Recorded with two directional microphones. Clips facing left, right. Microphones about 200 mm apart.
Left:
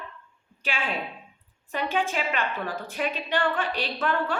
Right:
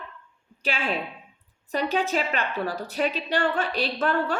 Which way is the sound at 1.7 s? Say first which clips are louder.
Right 3 dB; 40° right (ahead or behind).